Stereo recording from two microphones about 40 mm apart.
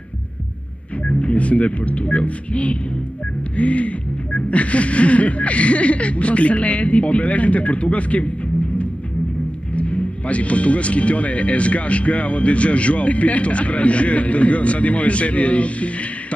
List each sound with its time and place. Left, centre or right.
1.0 s speech: left
9.8 s speech: left